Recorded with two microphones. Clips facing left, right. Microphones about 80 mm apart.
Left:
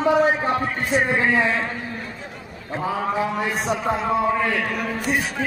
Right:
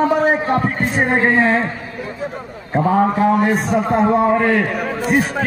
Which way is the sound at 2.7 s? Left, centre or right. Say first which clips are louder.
Right 8 dB; right.